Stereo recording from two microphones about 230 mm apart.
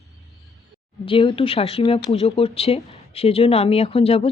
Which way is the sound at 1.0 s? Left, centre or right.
Left.